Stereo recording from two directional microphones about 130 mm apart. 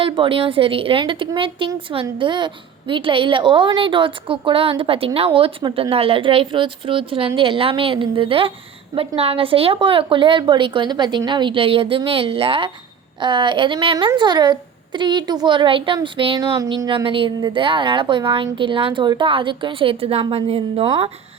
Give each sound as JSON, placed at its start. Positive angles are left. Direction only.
{"t": 0.0, "sound": "a woman's voice", "side_deg": -45}
{"t": 16.4, "sound": "speech", "side_deg": -30}
{"t": 16.9, "sound": "a woman's voice", "side_deg": -40}